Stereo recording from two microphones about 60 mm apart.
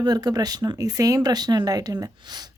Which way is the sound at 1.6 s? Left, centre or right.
Right.